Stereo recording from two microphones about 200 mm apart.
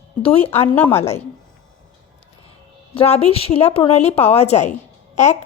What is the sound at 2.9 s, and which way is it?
A woman's voice, 30° left (ahead or behind).